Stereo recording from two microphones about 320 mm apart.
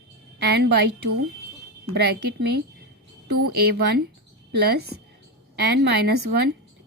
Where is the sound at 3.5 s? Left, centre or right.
Right.